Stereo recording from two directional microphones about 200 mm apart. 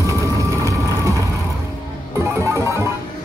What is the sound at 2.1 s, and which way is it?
Music, 15° right (ahead or behind).